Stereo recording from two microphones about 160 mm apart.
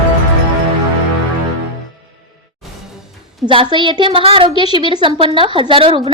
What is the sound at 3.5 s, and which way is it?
A woman's voice, 30° right (ahead or behind).